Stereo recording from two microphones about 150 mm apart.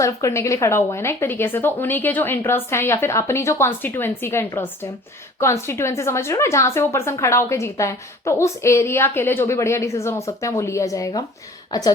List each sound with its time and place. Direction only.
0.0 s a woman's voice: 20° left (ahead or behind)